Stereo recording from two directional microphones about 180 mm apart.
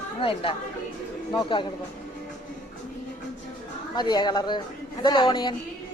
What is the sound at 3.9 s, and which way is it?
A woman's voice, 25° left (ahead or behind).